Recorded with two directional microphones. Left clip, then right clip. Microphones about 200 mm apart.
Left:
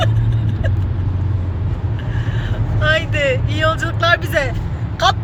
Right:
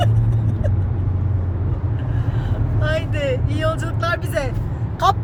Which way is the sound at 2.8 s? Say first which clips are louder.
Left 7 dB; centre (ahead or behind).